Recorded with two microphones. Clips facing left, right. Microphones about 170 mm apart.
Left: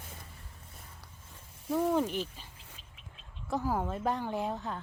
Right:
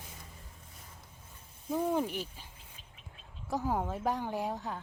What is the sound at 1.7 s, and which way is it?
Speech, 10° right (ahead or behind).